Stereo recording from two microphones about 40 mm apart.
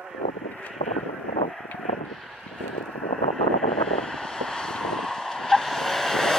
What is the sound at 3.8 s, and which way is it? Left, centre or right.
Vehicle, centre.